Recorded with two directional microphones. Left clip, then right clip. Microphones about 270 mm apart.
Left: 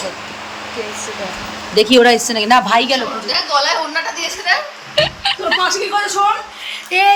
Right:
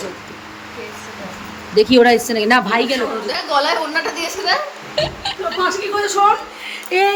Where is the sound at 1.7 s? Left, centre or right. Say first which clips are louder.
Left 1 dB; centre.